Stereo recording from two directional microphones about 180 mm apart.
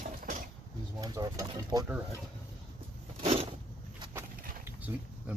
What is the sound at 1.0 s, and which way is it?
Speech, 20° right (ahead or behind).